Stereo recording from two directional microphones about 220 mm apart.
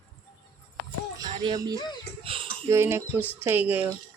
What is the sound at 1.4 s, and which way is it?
Speech, 15° right (ahead or behind).